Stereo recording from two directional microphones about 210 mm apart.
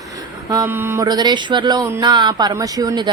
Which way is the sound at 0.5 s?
10° right (ahead or behind).